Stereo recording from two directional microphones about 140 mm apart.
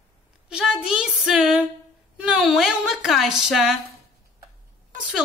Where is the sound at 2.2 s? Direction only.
5° right (ahead or behind).